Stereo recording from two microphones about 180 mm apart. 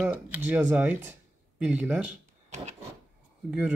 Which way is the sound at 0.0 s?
10° right (ahead or behind).